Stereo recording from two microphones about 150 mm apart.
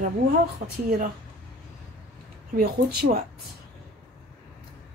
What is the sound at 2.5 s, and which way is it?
Speech, 90° right.